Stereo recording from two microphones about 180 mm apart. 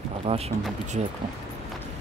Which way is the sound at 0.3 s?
35° right (ahead or behind).